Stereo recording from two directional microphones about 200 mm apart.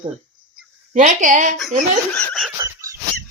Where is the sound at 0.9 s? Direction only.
40° right (ahead or behind).